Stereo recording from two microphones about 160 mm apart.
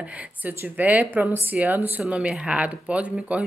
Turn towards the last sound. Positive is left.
turn(degrees=-10)  # may be behind; listen again after turning